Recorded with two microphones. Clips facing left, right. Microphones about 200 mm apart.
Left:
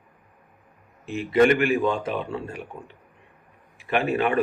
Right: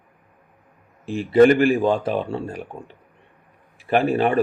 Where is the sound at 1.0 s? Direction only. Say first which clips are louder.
Right 5 dB; 35° right (ahead or behind).